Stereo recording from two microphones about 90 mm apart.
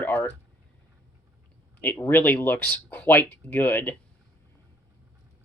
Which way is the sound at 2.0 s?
25° left (ahead or behind).